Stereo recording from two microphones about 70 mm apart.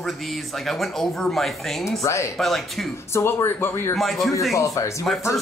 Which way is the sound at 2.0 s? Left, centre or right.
Left.